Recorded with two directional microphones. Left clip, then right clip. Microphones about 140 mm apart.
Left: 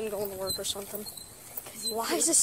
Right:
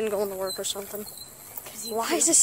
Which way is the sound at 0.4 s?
15° right (ahead or behind).